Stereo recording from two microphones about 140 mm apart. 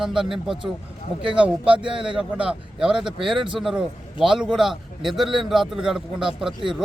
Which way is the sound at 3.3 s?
35° right (ahead or behind).